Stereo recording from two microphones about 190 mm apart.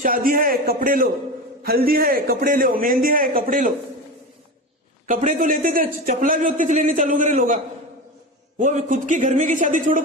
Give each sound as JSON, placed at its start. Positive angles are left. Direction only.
{"t": 0.0, "sound": "a man's voice", "side_deg": -45}
{"t": 5.0, "sound": "a man's voice", "side_deg": -45}